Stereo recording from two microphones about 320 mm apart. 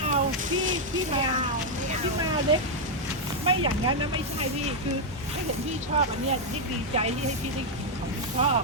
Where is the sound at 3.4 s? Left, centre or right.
Centre.